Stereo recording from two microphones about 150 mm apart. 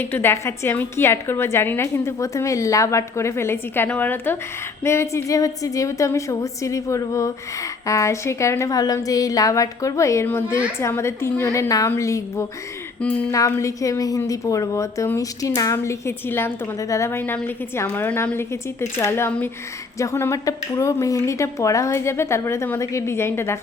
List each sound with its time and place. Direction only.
0.0 s a woman's voice: 15° left (ahead or behind)
13.0 s a woman's voice: 10° left (ahead or behind)
13.3 s a woman's voice: 20° left (ahead or behind)